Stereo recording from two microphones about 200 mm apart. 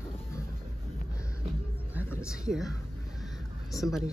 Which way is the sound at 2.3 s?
5° right (ahead or behind).